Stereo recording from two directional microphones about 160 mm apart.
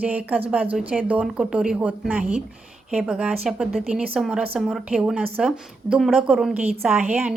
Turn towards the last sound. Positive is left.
turn(degrees=-10)  # may be behind; listen again after turning